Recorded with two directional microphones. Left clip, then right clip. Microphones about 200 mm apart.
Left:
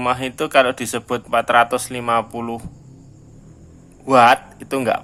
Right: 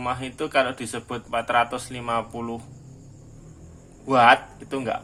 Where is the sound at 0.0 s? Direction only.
30° left (ahead or behind).